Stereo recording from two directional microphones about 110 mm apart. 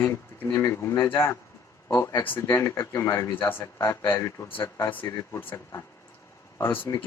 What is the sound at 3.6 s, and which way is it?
Speech, 35° left (ahead or behind).